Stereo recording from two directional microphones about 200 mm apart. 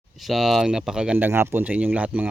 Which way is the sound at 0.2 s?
Centre (ahead or behind).